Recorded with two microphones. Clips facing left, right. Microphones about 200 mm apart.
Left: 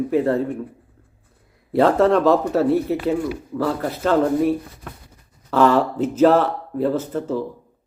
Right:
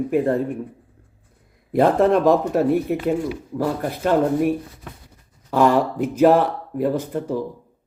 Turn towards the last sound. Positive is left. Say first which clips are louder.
# left 1 dB
turn(degrees=-15)  # may be behind; listen again after turning